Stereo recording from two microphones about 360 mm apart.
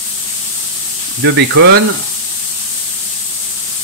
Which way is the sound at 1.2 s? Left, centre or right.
Right.